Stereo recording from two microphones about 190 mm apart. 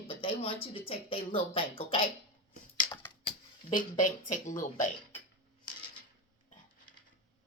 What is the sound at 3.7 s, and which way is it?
Speech, 45° left (ahead or behind).